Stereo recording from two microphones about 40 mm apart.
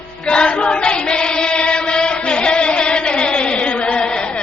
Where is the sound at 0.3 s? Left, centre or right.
Left.